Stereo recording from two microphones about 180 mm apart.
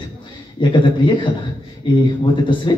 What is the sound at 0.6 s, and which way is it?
Speech, 25° left (ahead or behind).